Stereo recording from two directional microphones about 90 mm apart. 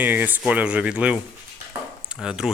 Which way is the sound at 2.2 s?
10° right (ahead or behind).